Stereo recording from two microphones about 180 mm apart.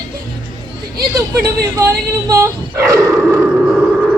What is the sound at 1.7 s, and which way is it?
Speech, 15° right (ahead or behind).